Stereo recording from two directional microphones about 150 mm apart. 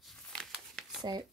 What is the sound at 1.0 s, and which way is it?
Speech, 25° right (ahead or behind).